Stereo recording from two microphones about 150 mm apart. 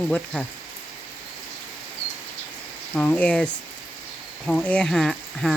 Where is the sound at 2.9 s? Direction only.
10° left (ahead or behind).